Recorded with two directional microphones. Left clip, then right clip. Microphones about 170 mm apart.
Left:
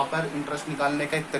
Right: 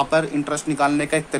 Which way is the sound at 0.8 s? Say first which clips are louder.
Right 5 dB; 50° right (ahead or behind).